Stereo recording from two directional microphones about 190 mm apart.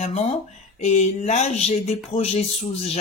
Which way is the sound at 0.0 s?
35° left (ahead or behind).